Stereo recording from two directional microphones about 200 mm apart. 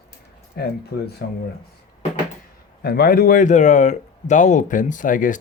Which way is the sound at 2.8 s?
50° left (ahead or behind).